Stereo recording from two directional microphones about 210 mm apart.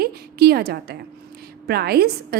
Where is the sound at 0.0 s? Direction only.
50° right (ahead or behind).